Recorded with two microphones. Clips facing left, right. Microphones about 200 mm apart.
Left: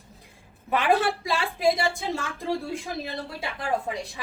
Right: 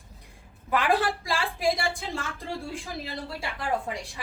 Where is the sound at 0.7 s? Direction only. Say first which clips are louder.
Left 2 dB; 25° left (ahead or behind).